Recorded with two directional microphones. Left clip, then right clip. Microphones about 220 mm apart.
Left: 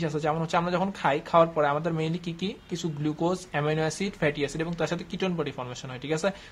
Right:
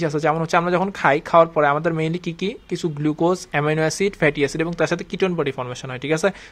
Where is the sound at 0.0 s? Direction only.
35° right (ahead or behind).